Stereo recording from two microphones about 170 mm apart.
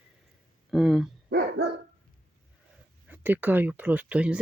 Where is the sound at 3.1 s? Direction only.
10° right (ahead or behind).